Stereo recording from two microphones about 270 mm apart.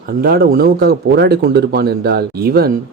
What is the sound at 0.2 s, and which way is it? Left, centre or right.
Speech, right.